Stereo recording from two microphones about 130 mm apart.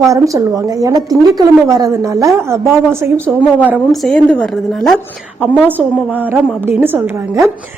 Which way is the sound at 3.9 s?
Centre (ahead or behind).